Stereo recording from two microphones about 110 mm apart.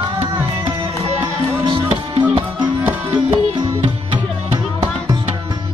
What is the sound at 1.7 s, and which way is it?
Music, 50° right (ahead or behind).